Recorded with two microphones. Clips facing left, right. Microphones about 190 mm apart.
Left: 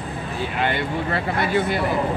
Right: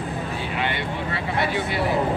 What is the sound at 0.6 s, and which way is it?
Speech, 50° left (ahead or behind).